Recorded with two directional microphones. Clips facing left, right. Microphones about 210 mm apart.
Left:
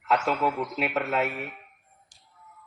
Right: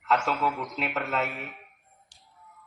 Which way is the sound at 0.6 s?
5° left (ahead or behind).